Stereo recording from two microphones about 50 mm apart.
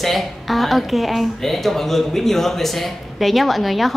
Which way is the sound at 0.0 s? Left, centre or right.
Centre.